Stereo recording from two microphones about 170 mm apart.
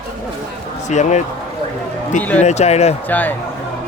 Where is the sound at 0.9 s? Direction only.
45° left (ahead or behind).